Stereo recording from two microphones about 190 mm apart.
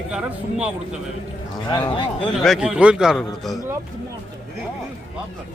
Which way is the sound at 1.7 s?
25° left (ahead or behind).